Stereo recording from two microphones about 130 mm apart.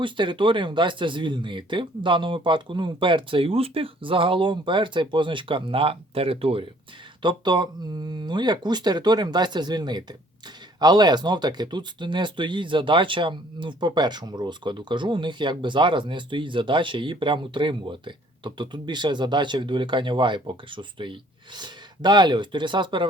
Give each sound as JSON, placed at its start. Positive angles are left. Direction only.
{"t": 0.0, "sound": "speech", "side_deg": -40}